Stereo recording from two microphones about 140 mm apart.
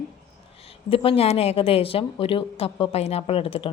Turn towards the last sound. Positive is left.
turn(degrees=40)  # may be behind; listen again after turning